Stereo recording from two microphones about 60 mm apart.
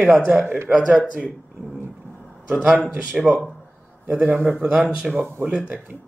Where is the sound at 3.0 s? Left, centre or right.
Centre.